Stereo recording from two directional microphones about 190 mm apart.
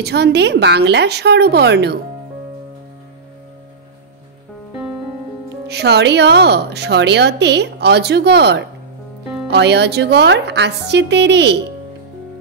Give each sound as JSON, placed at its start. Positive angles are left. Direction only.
{"t": 0.0, "sound": "a woman's voice", "side_deg": -60}
{"t": 5.7, "sound": "a woman's voice", "side_deg": -60}